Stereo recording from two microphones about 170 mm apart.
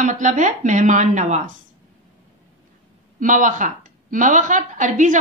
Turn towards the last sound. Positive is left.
turn(degrees=-45)  # may be behind; listen again after turning